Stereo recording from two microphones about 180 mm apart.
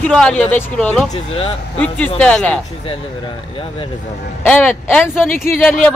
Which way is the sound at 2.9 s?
30° left (ahead or behind).